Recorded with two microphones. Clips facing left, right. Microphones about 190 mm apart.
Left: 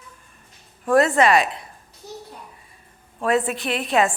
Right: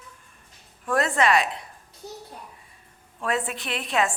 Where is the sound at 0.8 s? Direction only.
35° left (ahead or behind).